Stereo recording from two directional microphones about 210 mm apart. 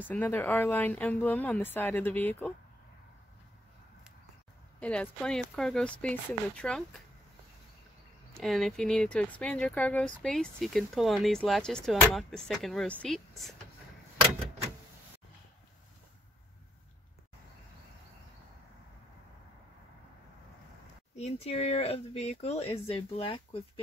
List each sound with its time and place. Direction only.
0.1 s speech: 10° left (ahead or behind)
4.7 s speech: 5° left (ahead or behind)
8.3 s speech: centre (ahead or behind)
21.2 s speech: 30° left (ahead or behind)